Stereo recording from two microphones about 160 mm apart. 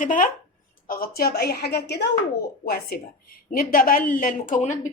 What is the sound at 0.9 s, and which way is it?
A woman's voice, 70° left (ahead or behind).